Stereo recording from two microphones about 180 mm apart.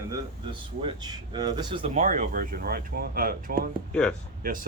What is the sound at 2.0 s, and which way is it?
Speech, 45° right (ahead or behind).